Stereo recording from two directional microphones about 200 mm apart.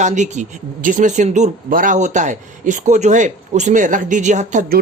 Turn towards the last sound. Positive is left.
turn(degrees=-35)  # may be behind; listen again after turning